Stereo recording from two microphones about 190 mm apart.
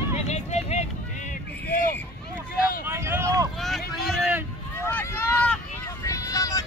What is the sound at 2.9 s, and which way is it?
Vehicle, 15° right (ahead or behind).